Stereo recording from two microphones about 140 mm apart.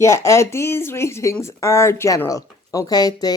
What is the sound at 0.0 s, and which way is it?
Speech, 20° left (ahead or behind).